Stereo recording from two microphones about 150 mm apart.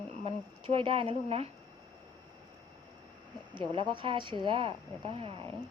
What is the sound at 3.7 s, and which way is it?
Speech, 35° right (ahead or behind).